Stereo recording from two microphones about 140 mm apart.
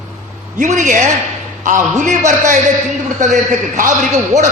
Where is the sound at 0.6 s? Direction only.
60° right (ahead or behind).